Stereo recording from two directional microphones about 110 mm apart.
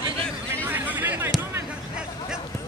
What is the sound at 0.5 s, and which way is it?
Chatter, 15° right (ahead or behind).